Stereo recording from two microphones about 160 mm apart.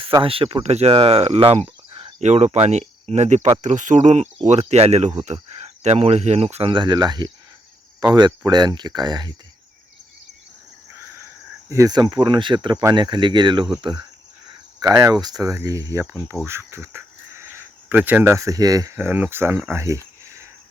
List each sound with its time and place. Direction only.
0.2 s speech: 35° right (ahead or behind)
11.7 s speech: 20° right (ahead or behind)
19.5 s cricket: 15° right (ahead or behind)